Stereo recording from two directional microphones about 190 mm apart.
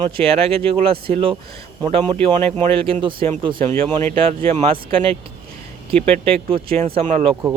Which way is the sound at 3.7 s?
10° left (ahead or behind).